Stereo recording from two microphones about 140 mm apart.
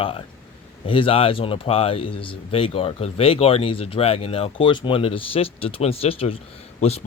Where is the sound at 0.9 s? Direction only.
40° left (ahead or behind).